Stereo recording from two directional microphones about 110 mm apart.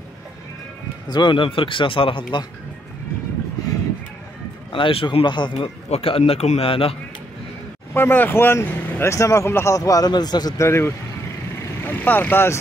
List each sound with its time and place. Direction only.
1.0 s speech: 40° left (ahead or behind)
4.7 s speech: 50° left (ahead or behind)
5.9 s speech: 60° left (ahead or behind); by 6.7 s 80° left
6.7 s speech: 55° left (ahead or behind)
7.9 s a man's voice: 20° left (ahead or behind); by 10.5 s 40° left (ahead or behind)
10.6 s speech: 25° left (ahead or behind)